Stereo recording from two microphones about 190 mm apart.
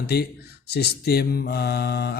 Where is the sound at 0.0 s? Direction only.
55° left (ahead or behind).